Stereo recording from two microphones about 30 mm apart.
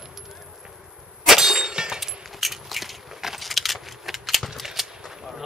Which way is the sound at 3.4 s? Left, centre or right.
Centre.